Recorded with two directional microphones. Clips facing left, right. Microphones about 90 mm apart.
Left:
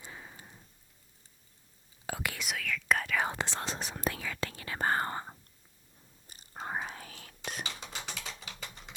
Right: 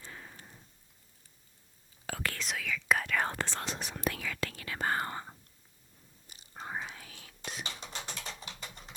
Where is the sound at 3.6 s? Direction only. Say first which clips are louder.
Left 1 dB; 35° left (ahead or behind).